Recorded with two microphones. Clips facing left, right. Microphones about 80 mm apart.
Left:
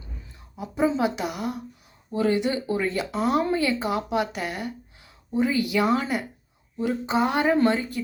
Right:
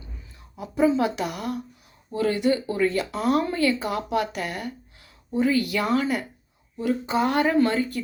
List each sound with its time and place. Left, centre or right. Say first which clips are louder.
0.5 s speech: right 3 dB; left